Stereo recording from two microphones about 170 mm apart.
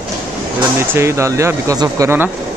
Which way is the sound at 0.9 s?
15° right (ahead or behind).